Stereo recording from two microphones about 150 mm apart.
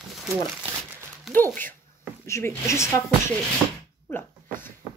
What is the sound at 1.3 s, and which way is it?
Speech, 15° left (ahead or behind).